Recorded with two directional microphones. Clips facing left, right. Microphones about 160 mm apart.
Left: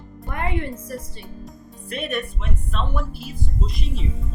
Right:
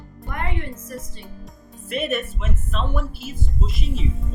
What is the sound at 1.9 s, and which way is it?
Speech, centre (ahead or behind).